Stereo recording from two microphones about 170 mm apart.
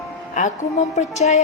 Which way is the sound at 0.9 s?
40° left (ahead or behind).